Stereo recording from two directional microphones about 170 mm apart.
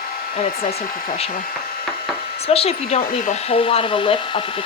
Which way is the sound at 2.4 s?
35° left (ahead or behind).